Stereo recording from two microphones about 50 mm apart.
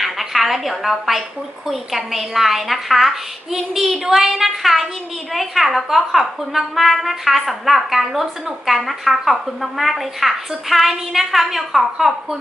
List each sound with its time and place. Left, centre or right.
0.0 s a woman's voice: centre